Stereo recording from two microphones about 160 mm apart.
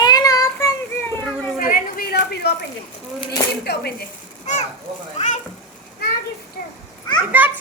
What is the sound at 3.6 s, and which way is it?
Speech, 90° left.